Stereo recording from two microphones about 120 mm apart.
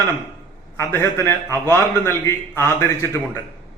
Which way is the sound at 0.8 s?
20° left (ahead or behind).